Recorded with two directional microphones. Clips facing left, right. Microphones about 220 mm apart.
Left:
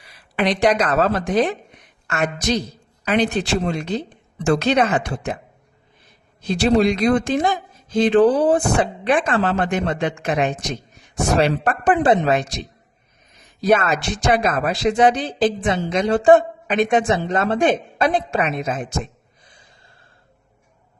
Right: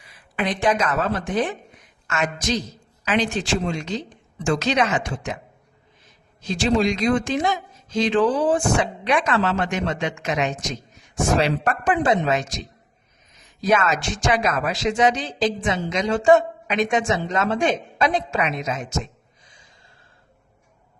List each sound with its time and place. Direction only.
0.0 s a sound: 80° left
0.6 s speech: 35° left (ahead or behind)
2.0 s a man's voice: 60° left (ahead or behind)
11.7 s speech: 35° left (ahead or behind)
12.1 s a man's voice: 55° left (ahead or behind)
13.6 s a man's voice: 55° left (ahead or behind)
18.4 s a sound: 50° left (ahead or behind)